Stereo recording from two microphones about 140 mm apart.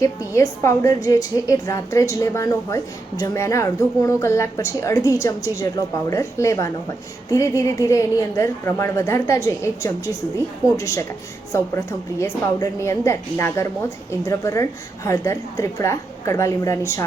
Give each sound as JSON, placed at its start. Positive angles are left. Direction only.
{"t": 0.0, "sound": "a woman's voice", "side_deg": 20}